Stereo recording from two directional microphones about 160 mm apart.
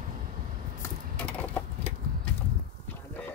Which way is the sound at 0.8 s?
15° left (ahead or behind).